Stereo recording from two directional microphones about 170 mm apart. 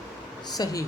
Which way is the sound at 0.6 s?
20° left (ahead or behind).